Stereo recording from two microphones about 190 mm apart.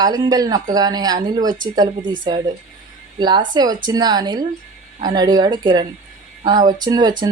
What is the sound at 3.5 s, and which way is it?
Speech, 20° right (ahead or behind).